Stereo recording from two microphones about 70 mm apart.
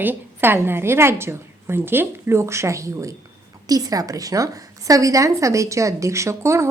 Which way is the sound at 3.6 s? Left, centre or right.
Right.